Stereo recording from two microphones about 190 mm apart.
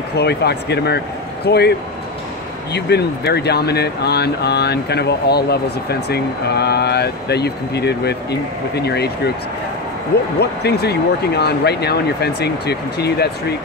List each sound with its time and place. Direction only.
0.2 s speech: 60° left (ahead or behind)